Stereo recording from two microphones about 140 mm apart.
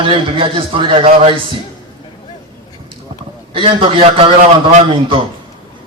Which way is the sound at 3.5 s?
40° right (ahead or behind).